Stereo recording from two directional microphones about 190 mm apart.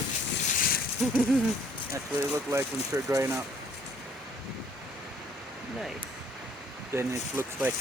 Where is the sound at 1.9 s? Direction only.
15° right (ahead or behind).